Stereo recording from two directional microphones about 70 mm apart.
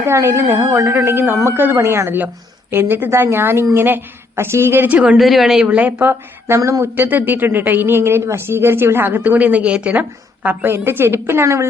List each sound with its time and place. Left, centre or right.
0.1 s speech: right
4.9 s speech: centre
5.1 s speech: centre
5.6 s speech: right
6.6 s speech: right
6.8 s speech: right